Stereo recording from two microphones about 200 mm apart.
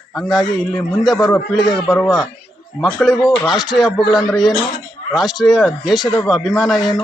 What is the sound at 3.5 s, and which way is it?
Speech, 20° left (ahead or behind).